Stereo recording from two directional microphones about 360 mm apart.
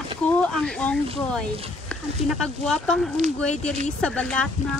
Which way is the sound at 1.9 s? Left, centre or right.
Centre.